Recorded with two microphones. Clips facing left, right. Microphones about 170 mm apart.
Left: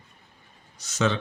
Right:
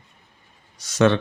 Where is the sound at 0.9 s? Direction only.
60° right (ahead or behind).